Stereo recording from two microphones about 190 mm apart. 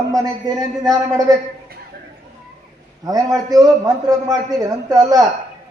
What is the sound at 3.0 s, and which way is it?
A man's voice, 20° right (ahead or behind).